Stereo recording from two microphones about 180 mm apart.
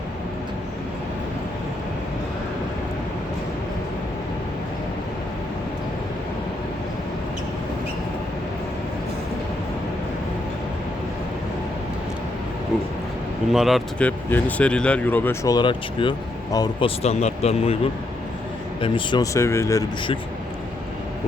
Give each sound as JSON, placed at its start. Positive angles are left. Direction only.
{"t": 13.5, "sound": "speech", "side_deg": 0}
{"t": 14.3, "sound": "speech", "side_deg": 10}
{"t": 17.0, "sound": "a man's voice", "side_deg": 40}
{"t": 18.8, "sound": "speech", "side_deg": 25}